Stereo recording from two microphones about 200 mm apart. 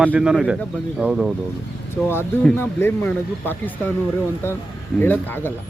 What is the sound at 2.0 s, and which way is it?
Speech, 10° left (ahead or behind).